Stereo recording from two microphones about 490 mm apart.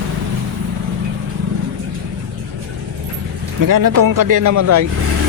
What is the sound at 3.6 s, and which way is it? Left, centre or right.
Speech, right.